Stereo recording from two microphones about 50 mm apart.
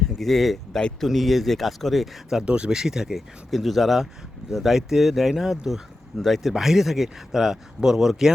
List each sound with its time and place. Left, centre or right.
0.2 s speech: centre
2.4 s speech: right
2.7 s speech: centre